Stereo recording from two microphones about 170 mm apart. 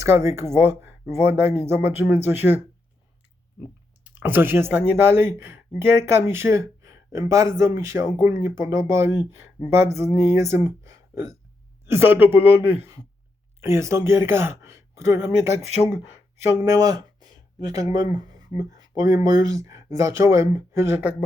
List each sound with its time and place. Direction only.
0.0 s speech: 15° right (ahead or behind)
4.0 s speech: 10° right (ahead or behind)
10.7 s a sound: 15° right (ahead or behind)
11.9 s speech: 15° right (ahead or behind)